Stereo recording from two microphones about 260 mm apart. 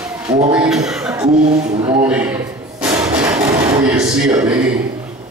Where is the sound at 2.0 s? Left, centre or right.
Centre.